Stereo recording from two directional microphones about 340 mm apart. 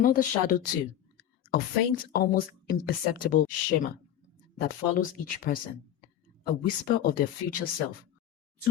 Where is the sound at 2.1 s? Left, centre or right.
Left.